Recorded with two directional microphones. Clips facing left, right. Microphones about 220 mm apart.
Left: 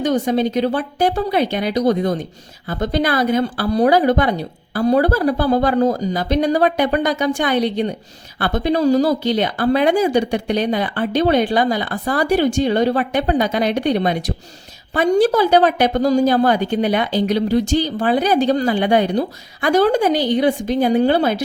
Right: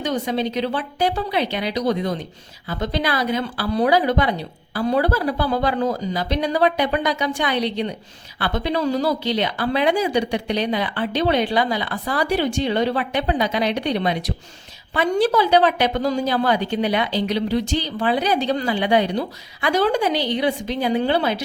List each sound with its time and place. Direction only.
0.0 s speech: 45° left (ahead or behind)